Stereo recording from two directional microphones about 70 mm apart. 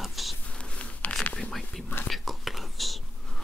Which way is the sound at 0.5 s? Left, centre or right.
Centre.